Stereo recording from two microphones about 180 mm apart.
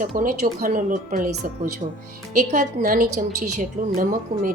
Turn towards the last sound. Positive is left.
turn(degrees=-50)  # may be behind; listen again after turning